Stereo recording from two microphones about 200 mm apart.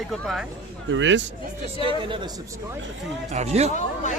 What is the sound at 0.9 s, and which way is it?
Speech, 65° right (ahead or behind).